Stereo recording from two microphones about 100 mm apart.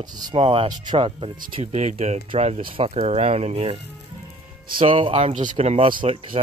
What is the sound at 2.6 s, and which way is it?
Speech, 60° right (ahead or behind).